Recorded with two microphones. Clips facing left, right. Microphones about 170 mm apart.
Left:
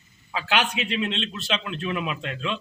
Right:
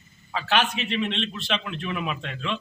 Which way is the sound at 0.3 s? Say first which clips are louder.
Right 1 dB; 10° left (ahead or behind).